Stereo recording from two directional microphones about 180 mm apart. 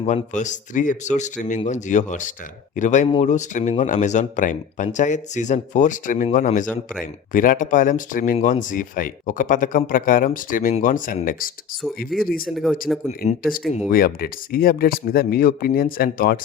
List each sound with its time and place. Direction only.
0.0 s a man's voice: 40° left (ahead or behind)
12.9 s speech: centre (ahead or behind)
13.2 s a man's voice: 35° left (ahead or behind)
13.9 s speech: 55° left (ahead or behind)